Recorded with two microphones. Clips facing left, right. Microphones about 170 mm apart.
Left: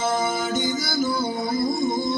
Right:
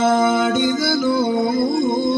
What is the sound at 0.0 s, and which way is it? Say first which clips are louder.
Music: right 8 dB; 60° right (ahead or behind).